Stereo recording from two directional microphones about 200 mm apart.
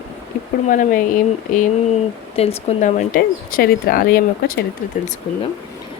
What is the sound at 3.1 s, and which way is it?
Speech, 45° left (ahead or behind).